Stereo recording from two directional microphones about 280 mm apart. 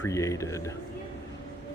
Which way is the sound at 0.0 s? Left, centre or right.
Centre.